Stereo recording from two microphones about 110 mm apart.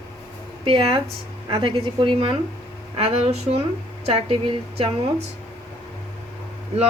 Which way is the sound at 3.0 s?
65° right (ahead or behind).